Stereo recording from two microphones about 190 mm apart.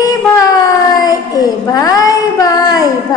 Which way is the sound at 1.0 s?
20° left (ahead or behind).